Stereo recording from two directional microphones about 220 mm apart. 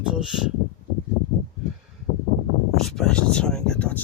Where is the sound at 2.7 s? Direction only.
Centre (ahead or behind).